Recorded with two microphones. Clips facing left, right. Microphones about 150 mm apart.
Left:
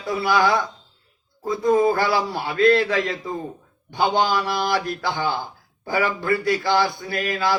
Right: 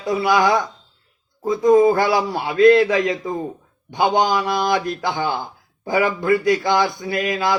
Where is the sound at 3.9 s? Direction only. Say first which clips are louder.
Right 3 dB; 20° right (ahead or behind).